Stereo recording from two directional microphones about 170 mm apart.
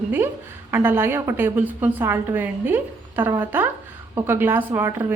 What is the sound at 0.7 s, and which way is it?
A woman's voice, 15° right (ahead or behind).